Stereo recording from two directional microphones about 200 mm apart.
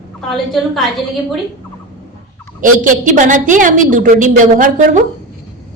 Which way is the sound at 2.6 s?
40° right (ahead or behind).